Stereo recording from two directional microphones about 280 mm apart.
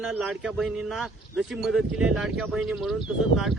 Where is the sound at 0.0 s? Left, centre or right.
Centre.